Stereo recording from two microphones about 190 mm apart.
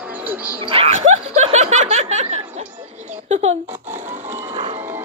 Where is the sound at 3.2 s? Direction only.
35° right (ahead or behind).